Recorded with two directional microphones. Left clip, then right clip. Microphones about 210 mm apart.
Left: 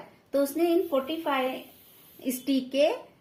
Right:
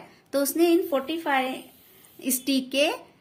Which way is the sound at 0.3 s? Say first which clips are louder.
Right 3 dB; 50° right (ahead or behind).